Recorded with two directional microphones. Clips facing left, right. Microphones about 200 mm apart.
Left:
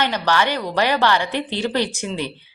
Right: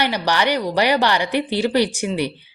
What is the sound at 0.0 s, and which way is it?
Speech, 15° right (ahead or behind).